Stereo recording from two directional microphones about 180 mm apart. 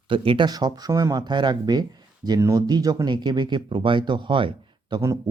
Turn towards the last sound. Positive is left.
turn(degrees=-20)  # may be behind; listen again after turning